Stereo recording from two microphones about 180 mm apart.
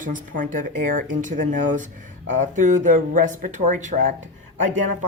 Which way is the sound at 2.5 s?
45° right (ahead or behind).